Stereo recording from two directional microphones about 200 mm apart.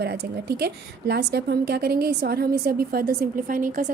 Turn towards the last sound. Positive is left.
turn(degrees=-45)  # may be behind; listen again after turning